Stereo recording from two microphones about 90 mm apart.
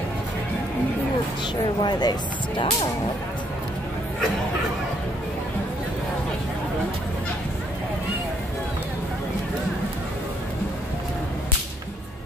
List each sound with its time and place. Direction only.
1.8 s speech: 50° left (ahead or behind)